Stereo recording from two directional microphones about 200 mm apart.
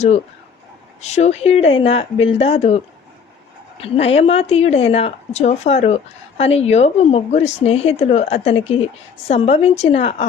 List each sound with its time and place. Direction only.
1.0 s speech: 35° left (ahead or behind)